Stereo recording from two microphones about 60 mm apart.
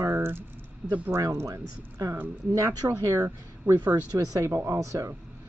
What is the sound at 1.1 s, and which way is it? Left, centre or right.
A woman's voice, right.